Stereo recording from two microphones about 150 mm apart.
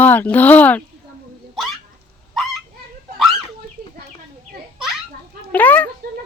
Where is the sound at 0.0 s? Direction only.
10° left (ahead or behind).